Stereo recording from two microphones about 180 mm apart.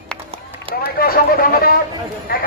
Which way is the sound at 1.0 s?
55° left (ahead or behind).